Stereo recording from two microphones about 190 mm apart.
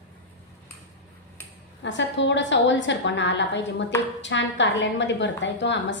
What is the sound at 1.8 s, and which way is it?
A woman's voice, 70° left (ahead or behind).